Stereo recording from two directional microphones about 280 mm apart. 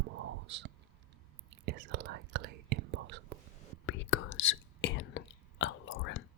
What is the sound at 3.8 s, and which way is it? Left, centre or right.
Whispering, left.